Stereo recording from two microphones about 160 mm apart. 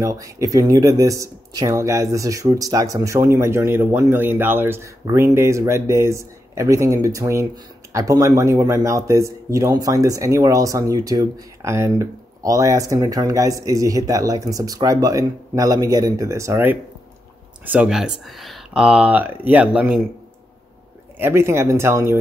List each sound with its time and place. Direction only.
0.0 s speech: 20° right (ahead or behind)
17.6 s speech: 5° right (ahead or behind)
21.2 s speech: 15° right (ahead or behind)